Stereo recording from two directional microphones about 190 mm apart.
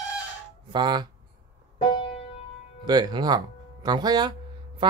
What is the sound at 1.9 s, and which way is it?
Music, 30° left (ahead or behind).